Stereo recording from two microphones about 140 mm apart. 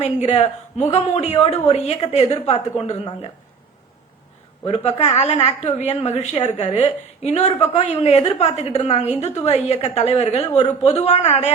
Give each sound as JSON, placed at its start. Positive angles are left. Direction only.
{"t": 0.0, "sound": "speech", "side_deg": 50}
{"t": 4.6, "sound": "speech", "side_deg": 45}